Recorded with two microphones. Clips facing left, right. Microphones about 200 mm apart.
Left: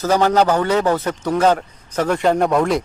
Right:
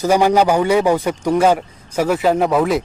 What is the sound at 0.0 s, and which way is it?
A man's voice, 10° right (ahead or behind).